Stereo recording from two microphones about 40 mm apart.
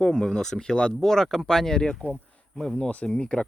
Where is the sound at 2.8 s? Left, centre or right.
Left.